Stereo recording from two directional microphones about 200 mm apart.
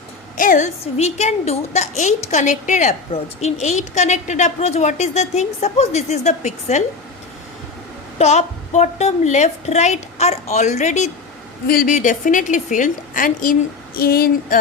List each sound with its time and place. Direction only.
0.3 s a woman's voice: 40° left (ahead or behind)
8.2 s a woman's voice: 35° left (ahead or behind)